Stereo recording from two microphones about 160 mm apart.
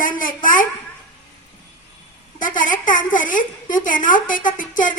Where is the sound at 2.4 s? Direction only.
55° left (ahead or behind).